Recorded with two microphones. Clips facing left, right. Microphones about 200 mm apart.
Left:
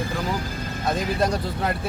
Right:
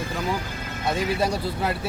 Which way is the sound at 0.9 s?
10° right (ahead or behind).